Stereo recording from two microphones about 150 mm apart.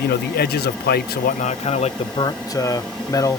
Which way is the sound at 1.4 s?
50° left (ahead or behind).